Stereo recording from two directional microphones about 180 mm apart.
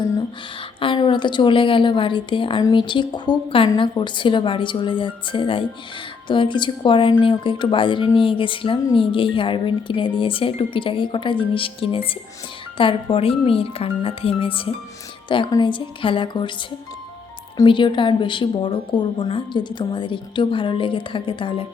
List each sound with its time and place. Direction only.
0.8 s a woman's voice: 25° left (ahead or behind)
17.6 s a woman's voice: 25° left (ahead or behind)